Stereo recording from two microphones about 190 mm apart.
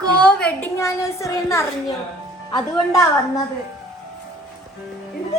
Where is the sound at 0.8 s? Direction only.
15° left (ahead or behind).